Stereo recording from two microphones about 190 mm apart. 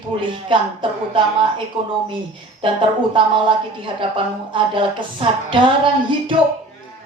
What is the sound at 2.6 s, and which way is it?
Speech, 25° right (ahead or behind).